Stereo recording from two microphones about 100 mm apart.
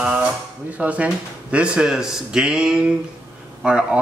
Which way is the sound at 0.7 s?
15° right (ahead or behind).